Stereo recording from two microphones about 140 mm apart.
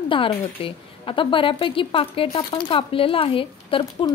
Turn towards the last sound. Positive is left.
turn(degrees=35)  # may be behind; listen again after turning